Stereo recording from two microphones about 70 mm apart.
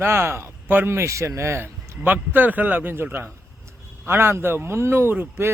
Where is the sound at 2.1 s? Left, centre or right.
Right.